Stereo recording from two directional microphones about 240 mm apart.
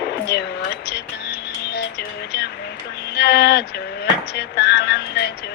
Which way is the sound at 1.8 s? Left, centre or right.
Left.